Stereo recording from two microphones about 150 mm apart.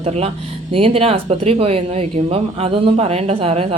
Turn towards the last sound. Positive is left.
turn(degrees=-40)  # may be behind; listen again after turning